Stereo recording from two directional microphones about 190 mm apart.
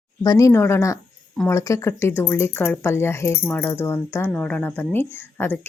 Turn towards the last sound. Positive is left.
turn(degrees=10)  # may be behind; listen again after turning